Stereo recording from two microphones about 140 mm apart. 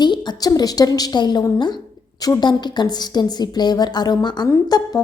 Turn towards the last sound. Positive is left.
turn(degrees=25)  # may be behind; listen again after turning